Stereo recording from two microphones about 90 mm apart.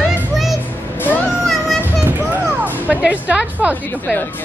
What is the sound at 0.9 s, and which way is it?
Music, 20° left (ahead or behind).